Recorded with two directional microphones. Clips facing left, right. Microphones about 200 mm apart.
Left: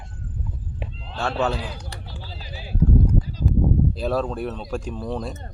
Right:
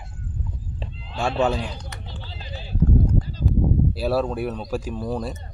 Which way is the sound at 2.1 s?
10° left (ahead or behind).